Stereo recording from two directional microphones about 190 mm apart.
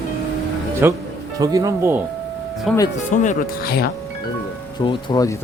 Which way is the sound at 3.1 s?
40° left (ahead or behind).